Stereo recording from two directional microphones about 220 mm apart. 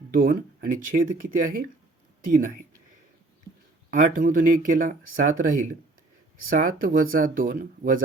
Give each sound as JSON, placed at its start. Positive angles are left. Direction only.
{"t": 0.1, "sound": "speech", "side_deg": -40}
{"t": 3.9, "sound": "speech", "side_deg": -35}